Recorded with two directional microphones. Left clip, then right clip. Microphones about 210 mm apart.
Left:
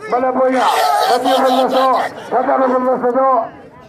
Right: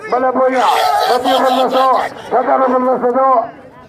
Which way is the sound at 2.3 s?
55° right (ahead or behind).